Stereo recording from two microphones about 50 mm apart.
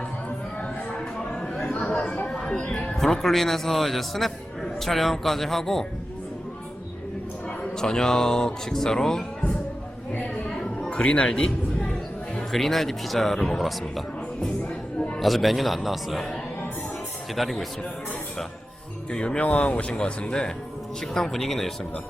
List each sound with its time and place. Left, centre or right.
0.9 s music: centre
1.9 s chatter: centre
2.1 s a sound: left
2.6 s a man's voice: left; by 5.8 s centre
7.8 s speech: centre
10.3 s a sound: centre
12.5 s a man's voice: centre
14.9 s a sound: left
15.2 s a man's voice: centre
19.1 s a man's voice: centre